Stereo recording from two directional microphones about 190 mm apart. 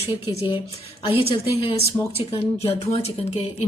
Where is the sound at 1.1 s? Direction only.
30° left (ahead or behind).